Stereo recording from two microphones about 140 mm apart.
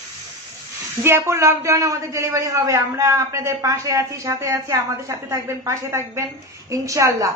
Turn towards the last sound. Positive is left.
turn(degrees=-20)  # may be behind; listen again after turning